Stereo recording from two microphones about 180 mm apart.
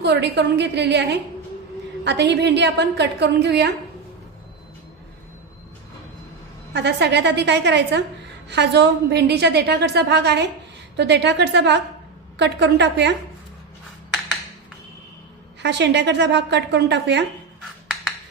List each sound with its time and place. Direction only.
0.0 s a woman's voice: 70° right (ahead or behind)
6.7 s a woman's voice: 70° right (ahead or behind)
15.6 s a woman's voice: 75° right (ahead or behind)